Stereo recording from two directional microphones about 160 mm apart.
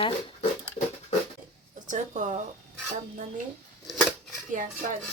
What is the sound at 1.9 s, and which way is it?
Music, 50° right (ahead or behind).